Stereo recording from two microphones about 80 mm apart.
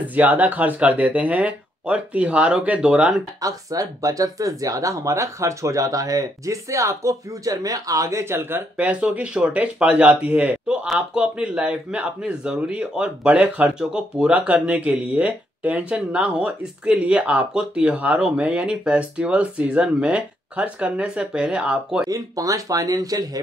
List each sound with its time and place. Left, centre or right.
0.0 s speech: centre
3.3 s speech: right
8.7 s speech: centre
22.0 s speech: right